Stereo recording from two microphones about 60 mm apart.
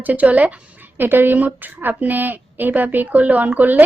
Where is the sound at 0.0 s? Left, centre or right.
Right.